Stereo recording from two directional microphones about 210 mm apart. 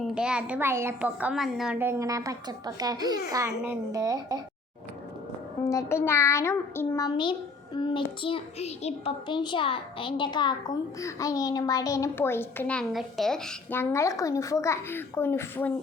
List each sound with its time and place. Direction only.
0.0 s a child's voice: 5° right (ahead or behind)
5.6 s a child's voice: 15° left (ahead or behind)